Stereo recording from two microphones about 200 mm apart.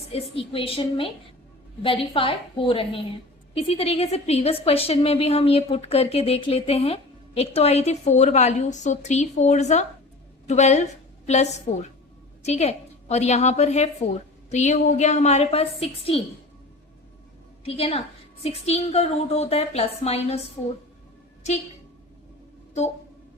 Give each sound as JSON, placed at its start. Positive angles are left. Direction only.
{"t": 0.1, "sound": "a woman's voice", "side_deg": 30}
{"t": 12.5, "sound": "a woman's voice", "side_deg": 35}
{"t": 17.7, "sound": "a woman's voice", "side_deg": 30}